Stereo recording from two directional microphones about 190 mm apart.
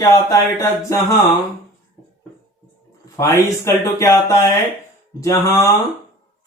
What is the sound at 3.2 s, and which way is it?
Speech, 15° left (ahead or behind).